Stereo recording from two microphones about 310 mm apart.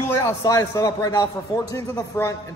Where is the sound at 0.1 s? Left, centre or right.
Centre.